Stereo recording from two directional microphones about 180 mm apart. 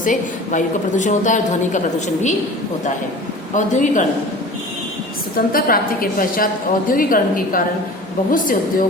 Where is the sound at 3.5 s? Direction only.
45° left (ahead or behind).